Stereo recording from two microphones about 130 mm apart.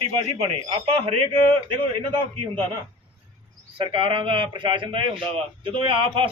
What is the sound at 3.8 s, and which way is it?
A man's voice, 40° right (ahead or behind).